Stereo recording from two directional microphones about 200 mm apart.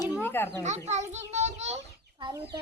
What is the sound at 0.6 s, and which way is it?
A child's voice, 35° right (ahead or behind).